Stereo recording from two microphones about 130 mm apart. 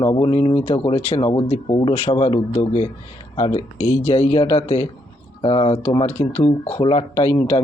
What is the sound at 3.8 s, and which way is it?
Speech, 20° left (ahead or behind).